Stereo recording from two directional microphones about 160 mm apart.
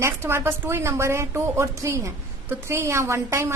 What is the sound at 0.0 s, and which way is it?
A woman's voice, 15° right (ahead or behind).